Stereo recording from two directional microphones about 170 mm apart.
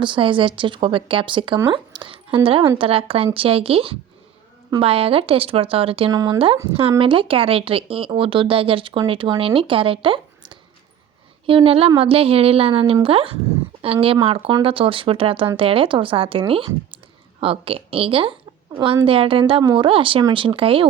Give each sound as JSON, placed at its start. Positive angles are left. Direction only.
{"t": 0.0, "sound": "speech", "side_deg": -30}
{"t": 6.1, "sound": "speech", "side_deg": -20}
{"t": 7.0, "sound": "speech", "side_deg": -30}